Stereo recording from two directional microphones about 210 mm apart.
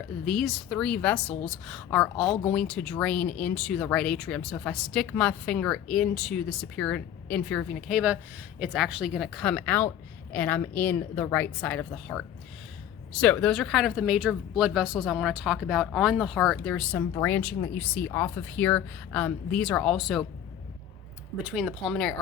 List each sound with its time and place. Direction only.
0.3 s speech: centre (ahead or behind)
21.4 s speech: centre (ahead or behind)